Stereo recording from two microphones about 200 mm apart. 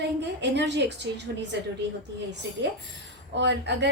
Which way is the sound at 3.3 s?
60° right (ahead or behind).